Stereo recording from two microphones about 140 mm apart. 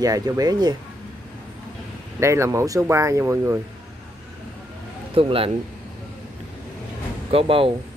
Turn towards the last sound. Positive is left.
turn(degrees=-40)  # may be behind; listen again after turning